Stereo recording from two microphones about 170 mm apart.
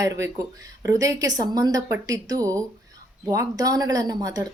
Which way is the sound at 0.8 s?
20° right (ahead or behind).